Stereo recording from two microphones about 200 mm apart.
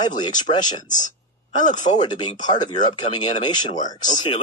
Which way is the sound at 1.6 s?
40° left (ahead or behind).